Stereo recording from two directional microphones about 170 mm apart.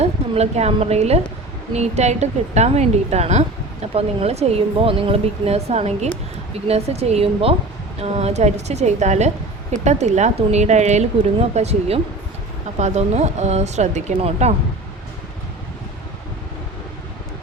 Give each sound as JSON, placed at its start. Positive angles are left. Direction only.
{"t": 0.0, "sound": "a woman's voice", "side_deg": -40}